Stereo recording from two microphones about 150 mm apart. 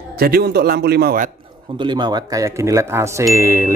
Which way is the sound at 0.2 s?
90° right.